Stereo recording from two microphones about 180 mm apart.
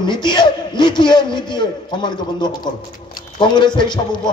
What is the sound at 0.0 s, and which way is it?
A man's voice, 25° left (ahead or behind).